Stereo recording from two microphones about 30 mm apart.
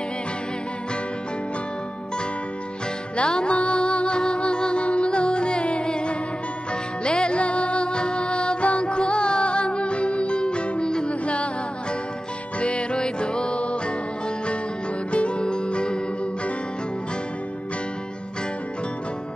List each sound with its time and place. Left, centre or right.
3.2 s music: left
11.1 s music: left
12.5 s music: left
15.0 s music: left